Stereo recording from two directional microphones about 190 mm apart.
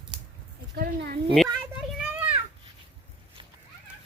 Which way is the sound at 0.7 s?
55° right (ahead or behind).